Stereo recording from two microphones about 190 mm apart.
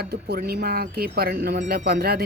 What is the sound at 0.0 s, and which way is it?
Speech, 55° right (ahead or behind).